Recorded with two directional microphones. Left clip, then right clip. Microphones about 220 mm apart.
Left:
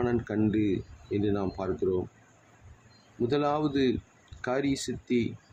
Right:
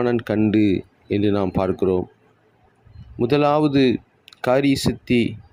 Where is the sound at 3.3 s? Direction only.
30° right (ahead or behind).